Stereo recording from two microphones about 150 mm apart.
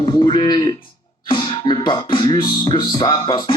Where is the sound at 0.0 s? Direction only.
35° left (ahead or behind).